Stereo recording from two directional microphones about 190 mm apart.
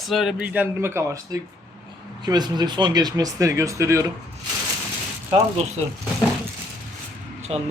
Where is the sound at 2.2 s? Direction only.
20° right (ahead or behind).